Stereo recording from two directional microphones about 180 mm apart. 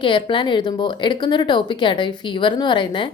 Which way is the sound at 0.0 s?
25° left (ahead or behind).